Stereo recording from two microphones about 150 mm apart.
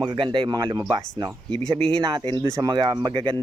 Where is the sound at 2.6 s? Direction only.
30° right (ahead or behind).